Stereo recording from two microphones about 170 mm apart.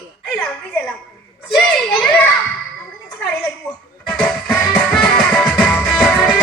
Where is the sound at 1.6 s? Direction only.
Centre (ahead or behind).